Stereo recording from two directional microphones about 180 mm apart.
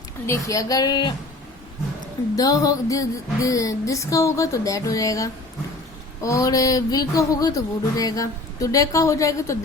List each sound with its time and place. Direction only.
0.3 s speech: 15° left (ahead or behind)
2.3 s speech: 20° left (ahead or behind)